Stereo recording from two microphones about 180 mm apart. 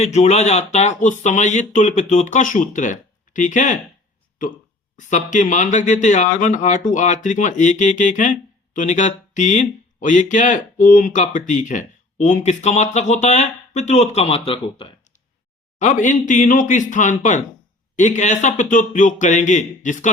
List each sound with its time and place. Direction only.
0.0 s speech: 40° left (ahead or behind)
15.8 s speech: 45° left (ahead or behind)